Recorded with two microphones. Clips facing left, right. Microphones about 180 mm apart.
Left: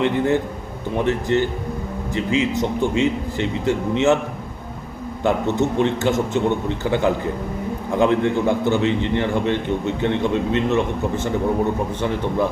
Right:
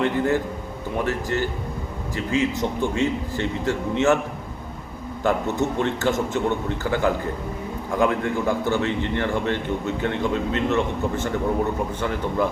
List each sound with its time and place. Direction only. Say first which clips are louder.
0.0 s a man's voice: left 3 dB; 20° left (ahead or behind)
5.2 s a man's voice: left 3 dB; 20° left (ahead or behind)